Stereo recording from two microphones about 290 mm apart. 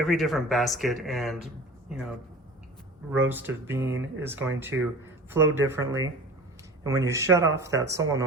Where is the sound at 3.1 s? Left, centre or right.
Centre.